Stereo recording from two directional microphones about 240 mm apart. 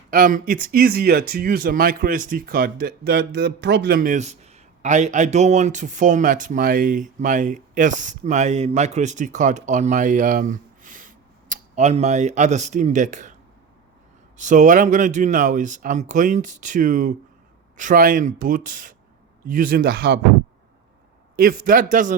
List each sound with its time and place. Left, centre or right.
0.1 s speech: right
14.3 s speech: right
21.3 s speech: right